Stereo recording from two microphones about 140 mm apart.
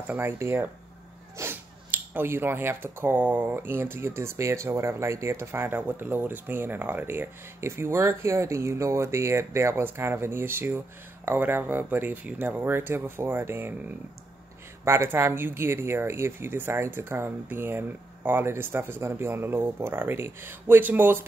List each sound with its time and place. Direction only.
0.0 s speech: 10° right (ahead or behind)
14.9 s speech: 20° right (ahead or behind)